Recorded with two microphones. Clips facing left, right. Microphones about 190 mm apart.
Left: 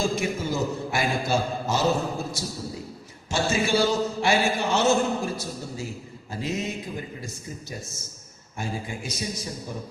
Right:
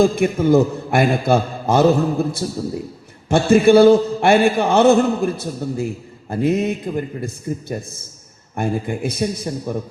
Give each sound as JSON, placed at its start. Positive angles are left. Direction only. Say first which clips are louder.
{"t": 0.0, "sound": "a man's voice", "louder": "right 11 dB", "side_deg": -55}